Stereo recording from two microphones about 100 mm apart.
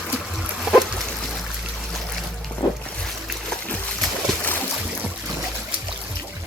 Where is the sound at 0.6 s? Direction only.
Centre (ahead or behind).